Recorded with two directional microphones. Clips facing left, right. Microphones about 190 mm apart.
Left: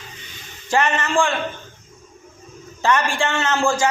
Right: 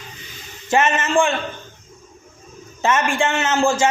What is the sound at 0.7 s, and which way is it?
Speech, 20° right (ahead or behind).